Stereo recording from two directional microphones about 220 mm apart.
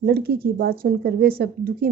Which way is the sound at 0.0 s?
45° right (ahead or behind).